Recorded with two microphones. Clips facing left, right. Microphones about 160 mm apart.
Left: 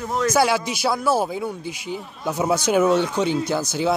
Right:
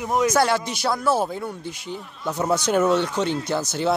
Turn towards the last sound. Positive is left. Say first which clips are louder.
# left 1 dB
turn(degrees=0)  # may be behind; listen again after turning